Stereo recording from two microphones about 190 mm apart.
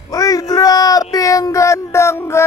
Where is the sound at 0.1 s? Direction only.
20° left (ahead or behind).